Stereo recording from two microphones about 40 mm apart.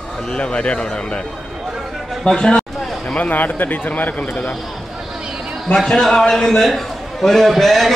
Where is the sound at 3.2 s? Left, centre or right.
Left.